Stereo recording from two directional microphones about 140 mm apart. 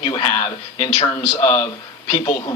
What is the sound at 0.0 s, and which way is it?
A man's voice, 30° left (ahead or behind).